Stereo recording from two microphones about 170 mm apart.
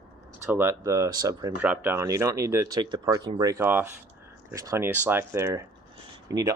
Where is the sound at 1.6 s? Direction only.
10° right (ahead or behind).